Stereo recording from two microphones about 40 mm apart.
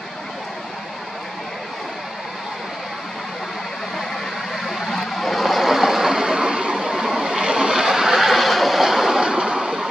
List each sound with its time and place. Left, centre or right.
4.6 s vehicle: centre
9.2 s vehicle: right